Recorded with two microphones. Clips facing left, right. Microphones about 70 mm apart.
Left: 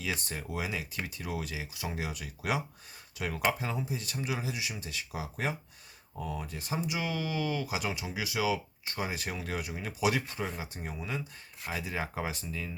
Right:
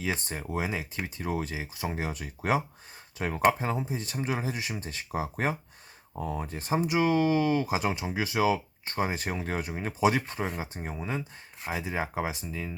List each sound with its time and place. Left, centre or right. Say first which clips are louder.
0.0 s speech: right 4 dB; right